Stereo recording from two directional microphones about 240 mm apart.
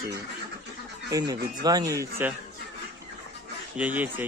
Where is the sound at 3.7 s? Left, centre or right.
Centre.